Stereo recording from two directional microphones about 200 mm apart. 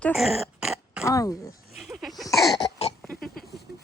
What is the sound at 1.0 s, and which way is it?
Speech, 15° left (ahead or behind).